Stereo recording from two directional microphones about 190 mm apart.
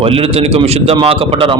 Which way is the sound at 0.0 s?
30° right (ahead or behind).